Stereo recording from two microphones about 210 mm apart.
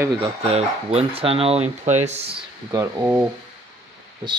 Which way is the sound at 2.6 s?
15° right (ahead or behind).